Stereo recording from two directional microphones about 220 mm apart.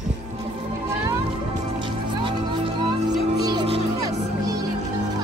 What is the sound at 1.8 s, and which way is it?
Music, 20° right (ahead or behind).